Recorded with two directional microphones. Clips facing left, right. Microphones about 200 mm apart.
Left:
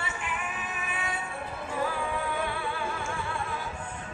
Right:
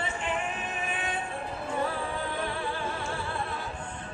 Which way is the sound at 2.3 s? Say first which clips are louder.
Even; 35° right (ahead or behind).